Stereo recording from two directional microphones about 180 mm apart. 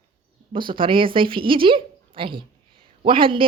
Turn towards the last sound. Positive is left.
turn(degrees=-30)  # may be behind; listen again after turning